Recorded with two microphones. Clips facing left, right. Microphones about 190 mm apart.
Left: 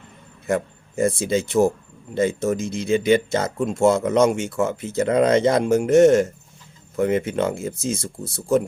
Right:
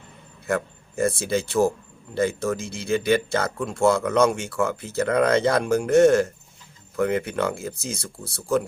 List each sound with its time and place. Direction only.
0.4 s speech: 20° left (ahead or behind)